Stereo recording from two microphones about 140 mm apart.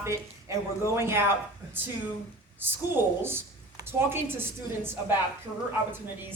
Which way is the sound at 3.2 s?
15° right (ahead or behind).